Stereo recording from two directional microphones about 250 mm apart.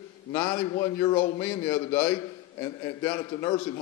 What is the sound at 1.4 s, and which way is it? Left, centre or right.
A man's voice, centre.